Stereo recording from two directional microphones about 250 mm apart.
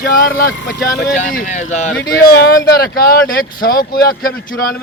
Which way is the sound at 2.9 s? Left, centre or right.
Left.